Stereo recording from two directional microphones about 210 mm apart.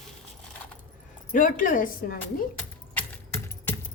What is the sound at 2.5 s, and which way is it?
Keys jangling, 10° left (ahead or behind).